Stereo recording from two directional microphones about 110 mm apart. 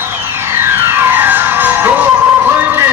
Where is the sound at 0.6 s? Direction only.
20° right (ahead or behind).